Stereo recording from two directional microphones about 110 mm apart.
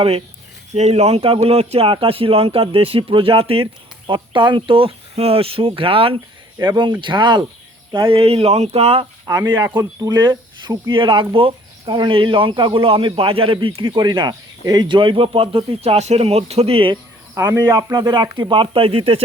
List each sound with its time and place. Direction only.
0.7 s speech: 90° right; by 3.6 s 55° right (ahead or behind)
4.0 s speech: 45° right (ahead or behind)
6.6 s speech: 40° right (ahead or behind)
8.1 s speech: 60° right (ahead or behind)
9.2 s speech: 30° right (ahead or behind); by 17.0 s 55° right (ahead or behind)
17.3 s speech: 25° right (ahead or behind)
17.9 s speech: 40° right (ahead or behind); by 19.2 s 60° right (ahead or behind)